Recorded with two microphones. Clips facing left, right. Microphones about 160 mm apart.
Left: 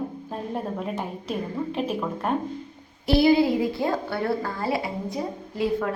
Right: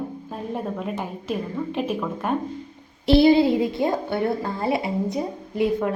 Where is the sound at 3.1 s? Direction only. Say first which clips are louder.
Right 3 dB; 25° right (ahead or behind).